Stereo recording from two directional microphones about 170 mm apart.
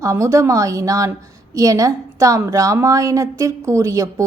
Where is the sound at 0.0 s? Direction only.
15° right (ahead or behind).